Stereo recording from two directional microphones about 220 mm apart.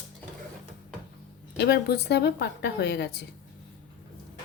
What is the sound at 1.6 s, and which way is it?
A woman's voice, 45° left (ahead or behind).